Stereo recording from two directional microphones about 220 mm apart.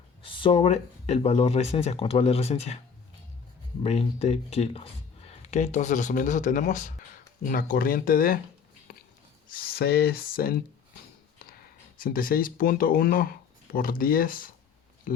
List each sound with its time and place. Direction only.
0.2 s speech: 25° left (ahead or behind)
3.8 s speech: 30° left (ahead or behind)
9.5 s speech: 45° left (ahead or behind)
11.9 s speech: 40° left (ahead or behind)